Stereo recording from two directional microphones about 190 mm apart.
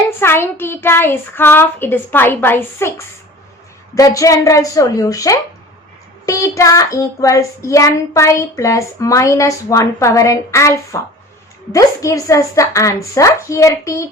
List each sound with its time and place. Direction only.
0.2 s a child's voice: 10° left (ahead or behind)
3.9 s a child's voice: 15° left (ahead or behind)